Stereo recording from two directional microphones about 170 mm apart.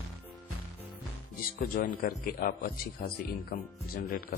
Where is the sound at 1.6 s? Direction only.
60° left (ahead or behind).